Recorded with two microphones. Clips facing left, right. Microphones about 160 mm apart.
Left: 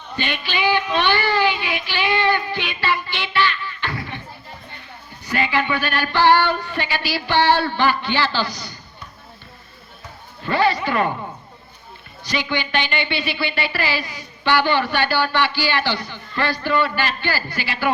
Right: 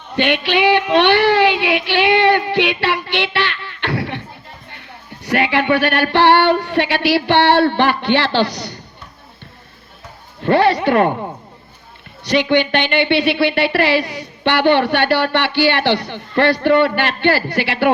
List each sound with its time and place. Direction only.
0.2 s child singing: 70° right (ahead or behind)
5.2 s child singing: 70° right (ahead or behind)
10.4 s a woman's voice: 65° right (ahead or behind)
12.2 s a woman's voice: 65° right (ahead or behind)